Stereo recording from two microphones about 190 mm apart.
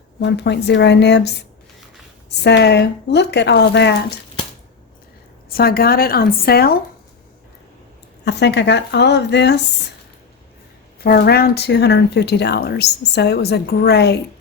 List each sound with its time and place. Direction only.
0.2 s speech: 60° left (ahead or behind)
5.5 s speech: 55° left (ahead or behind)
8.2 s speech: 65° left (ahead or behind)
11.0 s speech: 55° left (ahead or behind)